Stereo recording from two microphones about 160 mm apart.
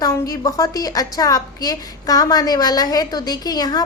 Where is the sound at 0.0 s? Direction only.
20° left (ahead or behind).